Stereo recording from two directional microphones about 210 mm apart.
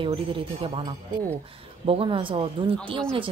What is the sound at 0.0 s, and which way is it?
A woman's voice, 25° right (ahead or behind).